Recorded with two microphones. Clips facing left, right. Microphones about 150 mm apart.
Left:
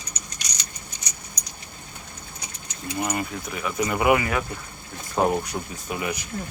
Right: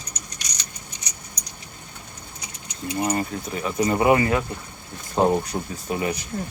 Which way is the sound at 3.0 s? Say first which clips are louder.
Right 3 dB; 30° right (ahead or behind).